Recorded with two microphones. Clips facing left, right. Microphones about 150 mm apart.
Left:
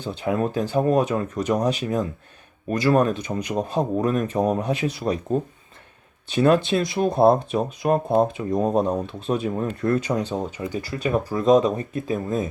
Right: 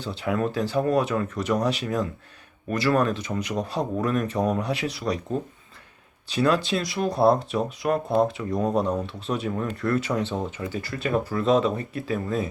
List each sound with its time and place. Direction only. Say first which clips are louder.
0.2 s speech: left 2 dB; 20° left (ahead or behind)